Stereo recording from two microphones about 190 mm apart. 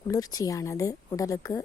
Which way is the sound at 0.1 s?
20° left (ahead or behind).